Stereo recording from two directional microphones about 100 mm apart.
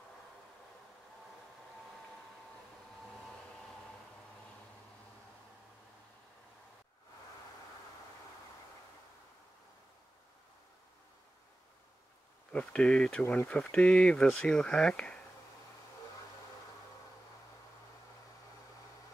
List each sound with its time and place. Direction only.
12.5 s speech: 10° left (ahead or behind)
13.2 s speech: 25° left (ahead or behind)
13.5 s speech: 10° left (ahead or behind)